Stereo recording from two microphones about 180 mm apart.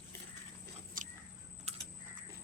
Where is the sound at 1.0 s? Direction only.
50° right (ahead or behind).